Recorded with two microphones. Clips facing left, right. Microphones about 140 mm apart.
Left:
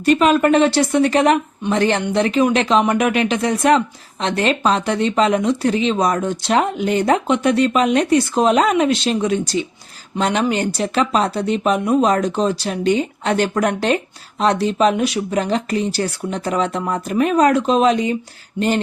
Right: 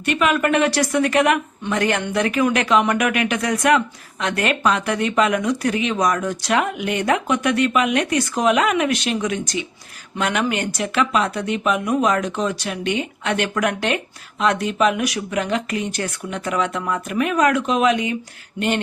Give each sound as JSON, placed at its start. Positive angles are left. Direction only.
{"t": 0.0, "sound": "speech", "side_deg": 35}